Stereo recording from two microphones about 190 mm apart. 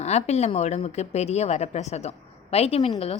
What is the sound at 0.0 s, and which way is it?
A woman's voice, 35° left (ahead or behind).